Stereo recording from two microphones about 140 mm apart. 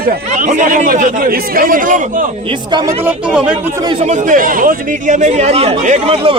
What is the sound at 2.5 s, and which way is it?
Speech, 30° right (ahead or behind).